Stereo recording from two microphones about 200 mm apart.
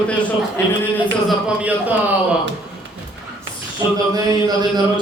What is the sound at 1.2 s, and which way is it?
Speech, 5° right (ahead or behind).